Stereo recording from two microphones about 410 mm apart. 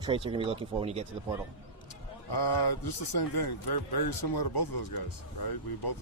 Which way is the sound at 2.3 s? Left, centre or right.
Left.